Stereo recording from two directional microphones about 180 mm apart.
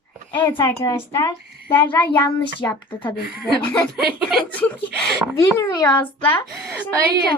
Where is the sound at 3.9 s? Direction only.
Centre (ahead or behind).